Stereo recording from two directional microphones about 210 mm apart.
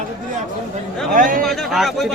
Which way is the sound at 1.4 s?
Centre (ahead or behind).